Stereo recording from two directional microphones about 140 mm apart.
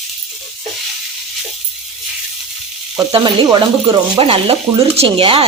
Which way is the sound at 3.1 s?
35° right (ahead or behind).